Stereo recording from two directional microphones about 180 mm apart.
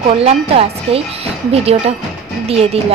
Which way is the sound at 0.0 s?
35° right (ahead or behind).